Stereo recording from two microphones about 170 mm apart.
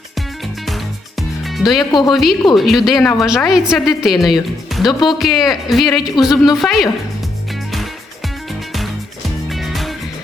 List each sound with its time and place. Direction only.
1.5 s music: centre (ahead or behind)
1.8 s speech: 25° left (ahead or behind)
2.0 s a woman's voice: centre (ahead or behind)
9.6 s music: centre (ahead or behind)